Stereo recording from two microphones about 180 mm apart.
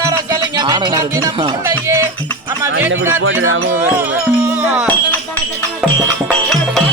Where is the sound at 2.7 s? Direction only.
90° right.